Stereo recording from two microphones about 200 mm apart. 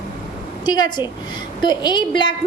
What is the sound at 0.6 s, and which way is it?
A woman's voice, 20° left (ahead or behind).